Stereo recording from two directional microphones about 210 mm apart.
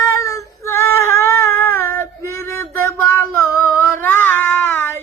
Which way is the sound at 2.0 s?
10° left (ahead or behind).